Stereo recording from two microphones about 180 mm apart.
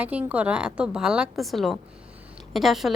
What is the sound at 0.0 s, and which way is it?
A woman's voice, 5° right (ahead or behind).